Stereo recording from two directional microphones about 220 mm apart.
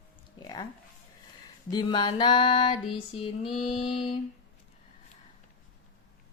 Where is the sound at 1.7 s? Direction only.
20° left (ahead or behind).